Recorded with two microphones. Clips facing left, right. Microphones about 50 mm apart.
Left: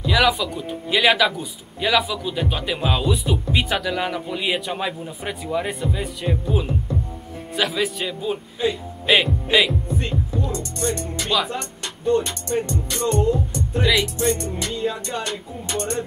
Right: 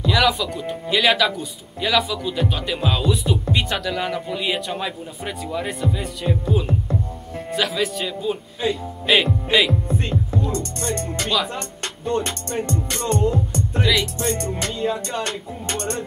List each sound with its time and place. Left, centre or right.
0.0 s speech: centre
11.2 s speech: centre
12.2 s music: right
14.7 s speech: centre
15.2 s music: right